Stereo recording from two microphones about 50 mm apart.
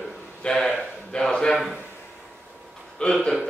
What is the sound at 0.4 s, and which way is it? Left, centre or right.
Speech, left.